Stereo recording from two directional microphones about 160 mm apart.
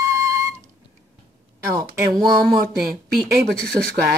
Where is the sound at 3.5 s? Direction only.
5° left (ahead or behind).